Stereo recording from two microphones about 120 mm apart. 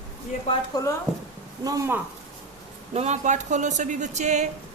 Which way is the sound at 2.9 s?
65° right (ahead or behind).